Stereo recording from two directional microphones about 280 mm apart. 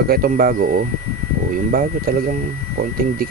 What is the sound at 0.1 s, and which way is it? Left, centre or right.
Speech, right.